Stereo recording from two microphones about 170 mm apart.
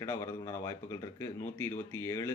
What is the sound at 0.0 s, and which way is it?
Speech, 15° left (ahead or behind).